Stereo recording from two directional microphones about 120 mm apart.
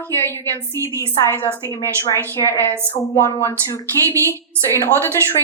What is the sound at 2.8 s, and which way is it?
A woman's voice, 20° left (ahead or behind).